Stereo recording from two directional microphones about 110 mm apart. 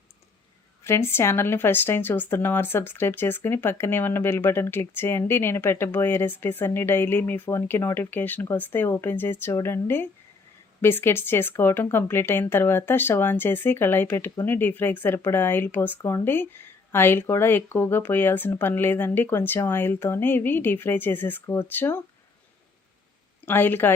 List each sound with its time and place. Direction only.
0.9 s speech: 25° left (ahead or behind)
23.5 s speech: 20° left (ahead or behind)